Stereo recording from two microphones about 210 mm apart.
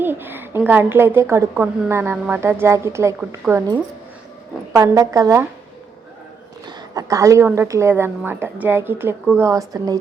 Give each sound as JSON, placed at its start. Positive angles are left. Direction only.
{"t": 0.0, "sound": "a woman's voice", "side_deg": -10}
{"t": 4.7, "sound": "a woman's voice", "side_deg": -15}
{"t": 6.7, "sound": "a woman's voice", "side_deg": -15}